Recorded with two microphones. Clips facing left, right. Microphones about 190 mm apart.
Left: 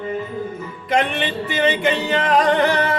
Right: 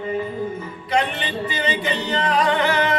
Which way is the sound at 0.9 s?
50° left (ahead or behind).